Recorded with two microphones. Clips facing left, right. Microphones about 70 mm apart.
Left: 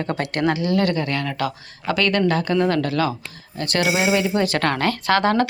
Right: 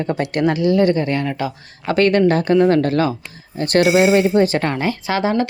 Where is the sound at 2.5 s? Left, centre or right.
Right.